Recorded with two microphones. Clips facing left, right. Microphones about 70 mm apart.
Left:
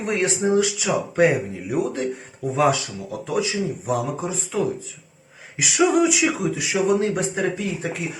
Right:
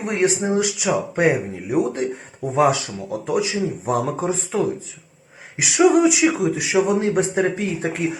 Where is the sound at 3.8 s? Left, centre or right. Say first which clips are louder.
Right 6 dB; right.